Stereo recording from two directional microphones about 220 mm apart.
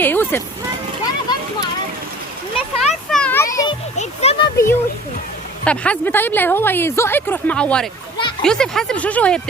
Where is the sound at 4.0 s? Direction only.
30° left (ahead or behind).